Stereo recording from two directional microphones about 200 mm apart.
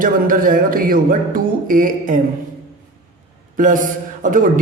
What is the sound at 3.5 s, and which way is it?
Speech, 40° right (ahead or behind).